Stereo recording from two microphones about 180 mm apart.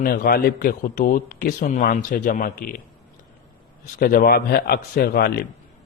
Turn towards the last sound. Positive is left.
turn(degrees=60)  # may be behind; listen again after turning